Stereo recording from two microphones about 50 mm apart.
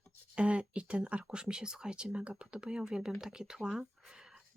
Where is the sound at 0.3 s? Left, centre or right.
Right.